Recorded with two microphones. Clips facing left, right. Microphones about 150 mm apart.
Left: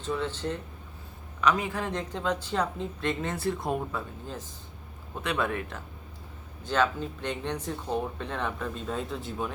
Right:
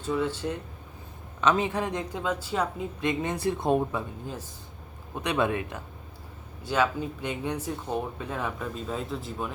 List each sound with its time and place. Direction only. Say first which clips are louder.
0.0 s speech: right 3 dB; 10° right (ahead or behind)
1.4 s speech: right 2 dB; 25° right (ahead or behind)
5.2 s speech: right 3 dB; 20° right (ahead or behind); by 9.5 s centre (ahead or behind)